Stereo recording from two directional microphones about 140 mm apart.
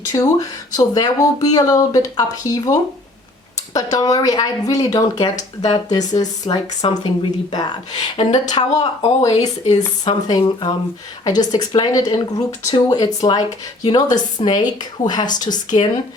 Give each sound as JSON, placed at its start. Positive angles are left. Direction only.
{"t": 0.1, "sound": "a woman's voice", "side_deg": 25}
{"t": 9.0, "sound": "speech", "side_deg": 50}
{"t": 10.1, "sound": "a woman's voice", "side_deg": 35}